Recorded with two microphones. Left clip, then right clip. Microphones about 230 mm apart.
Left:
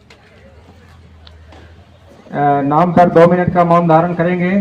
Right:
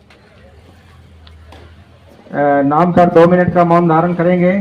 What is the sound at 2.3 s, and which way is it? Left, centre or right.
A man's voice, left.